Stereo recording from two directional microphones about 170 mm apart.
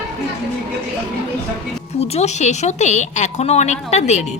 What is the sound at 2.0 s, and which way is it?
A woman's voice, 40° left (ahead or behind).